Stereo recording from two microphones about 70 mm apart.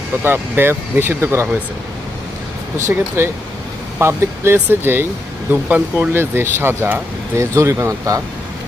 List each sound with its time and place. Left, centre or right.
0.2 s speech: right
3.2 s speech: right
6.1 s speech: right
7.3 s speech: right